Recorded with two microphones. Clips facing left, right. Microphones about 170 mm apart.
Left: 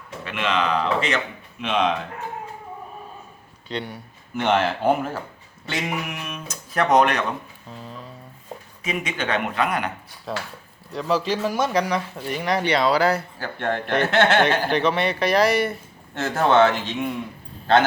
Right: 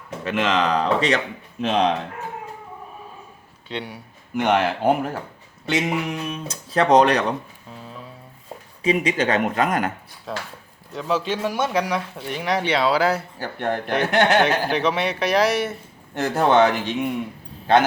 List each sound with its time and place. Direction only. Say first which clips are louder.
0.3 s speech: right 3 dB; 45° right (ahead or behind)
3.7 s speech: left 1 dB; 5° right (ahead or behind); by 7.3 s 35° right (ahead or behind)
8.8 s speech: right 7 dB; 35° right (ahead or behind)
10.3 s speech: left 1 dB; centre (ahead or behind)
16.2 s speech: right 1 dB; 15° right (ahead or behind)